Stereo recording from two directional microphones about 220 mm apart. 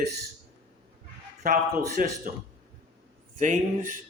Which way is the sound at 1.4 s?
40° right (ahead or behind).